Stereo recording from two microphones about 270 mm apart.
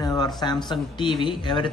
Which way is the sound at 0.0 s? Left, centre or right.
Centre.